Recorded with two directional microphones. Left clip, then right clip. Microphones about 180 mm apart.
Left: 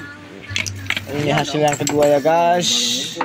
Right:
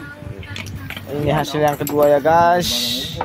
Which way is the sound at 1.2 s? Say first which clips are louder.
Even; 10° left (ahead or behind).